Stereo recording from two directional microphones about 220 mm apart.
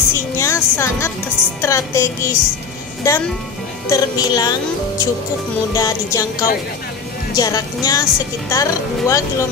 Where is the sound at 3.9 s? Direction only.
15° left (ahead or behind).